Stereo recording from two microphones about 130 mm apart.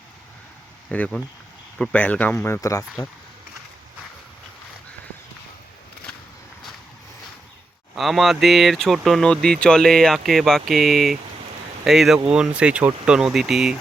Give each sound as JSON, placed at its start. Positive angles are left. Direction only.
{"t": 0.9, "sound": "speech", "side_deg": 10}
{"t": 7.9, "sound": "speech", "side_deg": 0}